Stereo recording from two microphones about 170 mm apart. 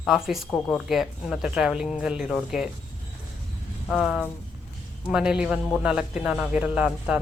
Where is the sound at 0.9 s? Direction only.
Centre (ahead or behind).